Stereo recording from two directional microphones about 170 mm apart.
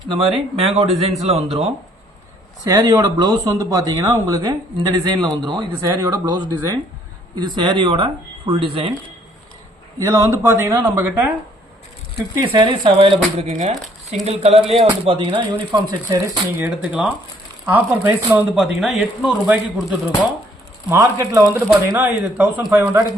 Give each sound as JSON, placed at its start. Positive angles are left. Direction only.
{"t": 0.1, "sound": "speech", "side_deg": -35}
{"t": 2.6, "sound": "speech", "side_deg": -20}
{"t": 10.0, "sound": "speech", "side_deg": -20}
{"t": 12.4, "sound": "speech", "side_deg": -25}
{"t": 20.9, "sound": "speech", "side_deg": -15}